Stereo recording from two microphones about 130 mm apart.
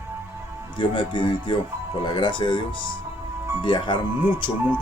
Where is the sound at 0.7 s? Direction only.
40° left (ahead or behind).